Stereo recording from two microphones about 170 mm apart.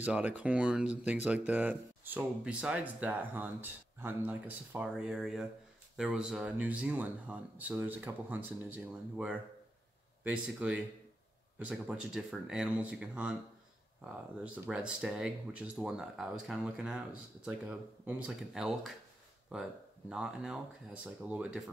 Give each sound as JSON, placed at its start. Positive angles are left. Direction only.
{"t": 0.0, "sound": "speech", "side_deg": -10}